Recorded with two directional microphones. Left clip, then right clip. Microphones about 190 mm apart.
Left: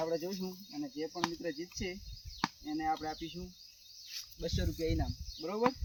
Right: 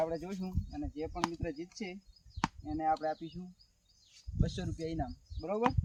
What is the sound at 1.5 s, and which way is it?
Speech, 20° right (ahead or behind).